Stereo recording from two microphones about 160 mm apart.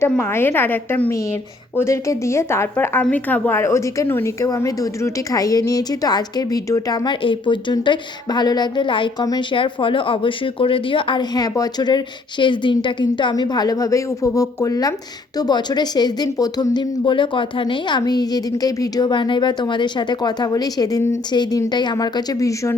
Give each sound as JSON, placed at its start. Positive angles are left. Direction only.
{"t": 0.1, "sound": "a woman's voice", "side_deg": 15}